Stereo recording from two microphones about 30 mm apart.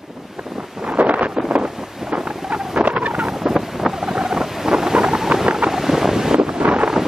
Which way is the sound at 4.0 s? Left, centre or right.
Centre.